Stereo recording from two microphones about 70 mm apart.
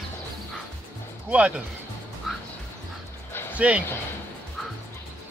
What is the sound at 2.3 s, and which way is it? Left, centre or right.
Music, centre.